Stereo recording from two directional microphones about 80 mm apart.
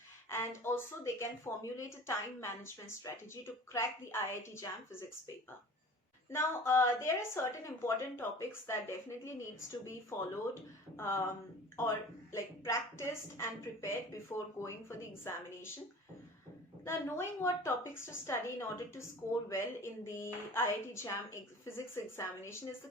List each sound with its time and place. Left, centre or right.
0.3 s a woman's voice: left
6.3 s a woman's voice: left
16.8 s a woman's voice: left
19.5 s a woman's voice: left